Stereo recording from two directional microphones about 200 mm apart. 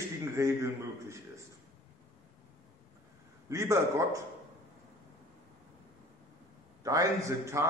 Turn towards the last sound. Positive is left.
turn(degrees=-15)  # may be behind; listen again after turning